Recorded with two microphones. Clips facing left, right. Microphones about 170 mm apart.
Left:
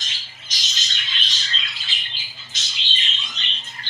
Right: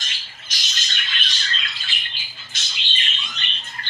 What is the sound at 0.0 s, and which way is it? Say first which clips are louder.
Squawk: right 2 dB; 55° right (ahead or behind).